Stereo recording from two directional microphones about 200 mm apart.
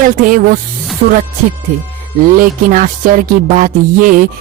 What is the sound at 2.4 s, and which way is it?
Music, 40° right (ahead or behind).